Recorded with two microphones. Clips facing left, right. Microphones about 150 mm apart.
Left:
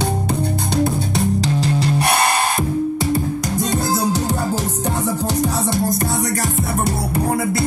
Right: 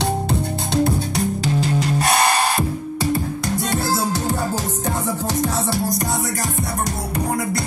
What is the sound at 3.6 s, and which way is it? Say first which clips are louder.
Music: left 2 dB; 20° left (ahead or behind).